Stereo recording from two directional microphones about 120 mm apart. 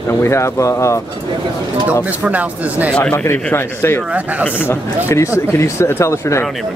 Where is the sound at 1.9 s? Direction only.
15° right (ahead or behind).